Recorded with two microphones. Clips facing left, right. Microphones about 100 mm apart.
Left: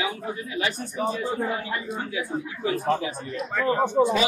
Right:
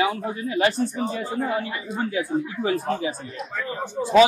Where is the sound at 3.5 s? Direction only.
55° left (ahead or behind).